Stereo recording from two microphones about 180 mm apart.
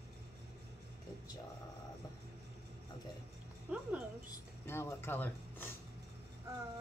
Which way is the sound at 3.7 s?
10° right (ahead or behind).